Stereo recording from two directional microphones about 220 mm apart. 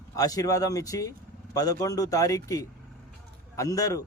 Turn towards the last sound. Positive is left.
turn(degrees=15)  # may be behind; listen again after turning